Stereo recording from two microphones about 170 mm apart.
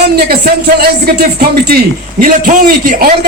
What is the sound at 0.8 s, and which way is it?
A man's voice, 65° right (ahead or behind).